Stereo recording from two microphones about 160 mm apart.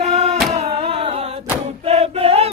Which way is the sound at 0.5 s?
40° right (ahead or behind).